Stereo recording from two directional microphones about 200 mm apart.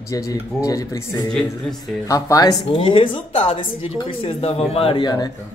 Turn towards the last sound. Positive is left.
turn(degrees=20)  # may be behind; listen again after turning